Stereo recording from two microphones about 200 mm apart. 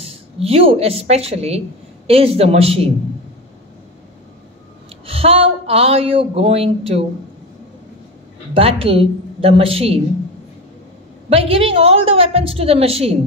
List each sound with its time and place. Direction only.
0.0 s a woman's voice: 30° right (ahead or behind)
5.0 s speech: 30° right (ahead or behind)
8.5 s speech: 30° right (ahead or behind)
11.2 s speech: 30° right (ahead or behind)